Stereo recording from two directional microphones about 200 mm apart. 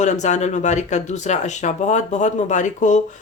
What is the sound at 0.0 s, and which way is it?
Speech, 35° left (ahead or behind).